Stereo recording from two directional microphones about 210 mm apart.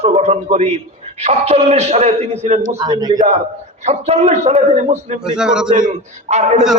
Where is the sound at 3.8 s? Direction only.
30° right (ahead or behind).